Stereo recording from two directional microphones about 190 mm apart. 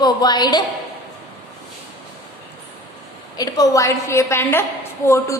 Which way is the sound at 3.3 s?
20° left (ahead or behind).